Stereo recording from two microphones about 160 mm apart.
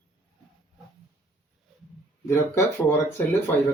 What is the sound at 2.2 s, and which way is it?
Speech, 15° left (ahead or behind).